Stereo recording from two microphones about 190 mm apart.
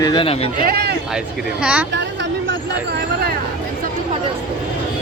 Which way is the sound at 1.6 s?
5° right (ahead or behind).